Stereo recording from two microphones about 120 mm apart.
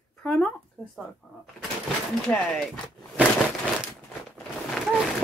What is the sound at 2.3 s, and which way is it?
Speech, 15° left (ahead or behind).